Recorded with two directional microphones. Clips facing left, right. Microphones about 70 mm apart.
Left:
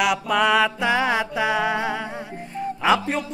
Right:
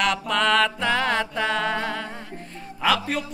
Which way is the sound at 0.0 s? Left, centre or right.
Centre.